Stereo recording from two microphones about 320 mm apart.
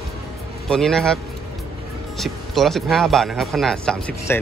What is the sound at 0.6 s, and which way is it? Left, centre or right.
Speech, centre.